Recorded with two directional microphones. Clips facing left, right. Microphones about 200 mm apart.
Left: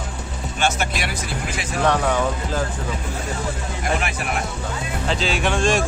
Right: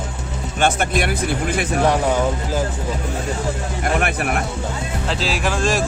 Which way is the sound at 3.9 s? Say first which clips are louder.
Right 5 dB; 55° right (ahead or behind).